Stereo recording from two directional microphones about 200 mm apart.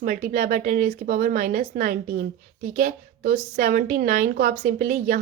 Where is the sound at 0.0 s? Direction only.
45° right (ahead or behind).